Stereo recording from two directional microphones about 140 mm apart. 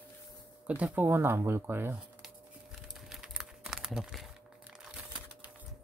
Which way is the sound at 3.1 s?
5° right (ahead or behind).